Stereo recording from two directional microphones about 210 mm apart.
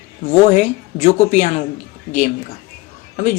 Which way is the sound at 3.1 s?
35° left (ahead or behind).